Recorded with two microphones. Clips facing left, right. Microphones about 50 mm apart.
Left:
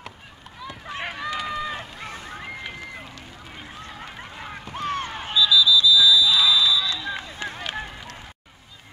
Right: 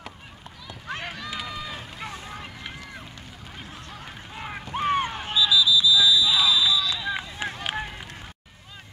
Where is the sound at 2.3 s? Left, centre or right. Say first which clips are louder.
Left 3 dB; centre.